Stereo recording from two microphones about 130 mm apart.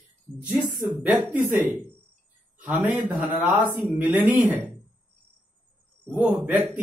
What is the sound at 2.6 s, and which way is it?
Speech, 15° right (ahead or behind).